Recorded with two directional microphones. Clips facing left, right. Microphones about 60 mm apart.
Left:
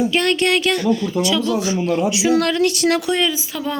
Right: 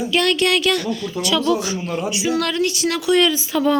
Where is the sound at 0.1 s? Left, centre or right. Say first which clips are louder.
Even; left.